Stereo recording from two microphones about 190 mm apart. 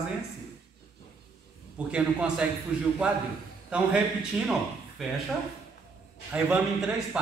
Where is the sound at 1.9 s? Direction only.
5° right (ahead or behind).